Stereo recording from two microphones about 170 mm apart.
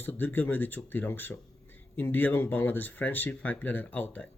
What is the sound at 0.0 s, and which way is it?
Speech, 10° left (ahead or behind).